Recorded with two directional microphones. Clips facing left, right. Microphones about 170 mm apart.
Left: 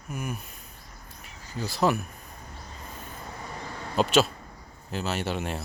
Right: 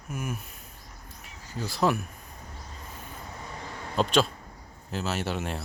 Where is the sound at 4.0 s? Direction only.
5° left (ahead or behind).